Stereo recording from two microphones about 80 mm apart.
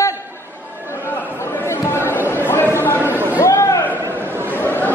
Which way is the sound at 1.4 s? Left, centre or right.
Left.